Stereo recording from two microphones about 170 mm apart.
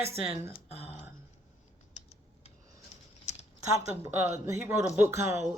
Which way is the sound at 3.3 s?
40° left (ahead or behind).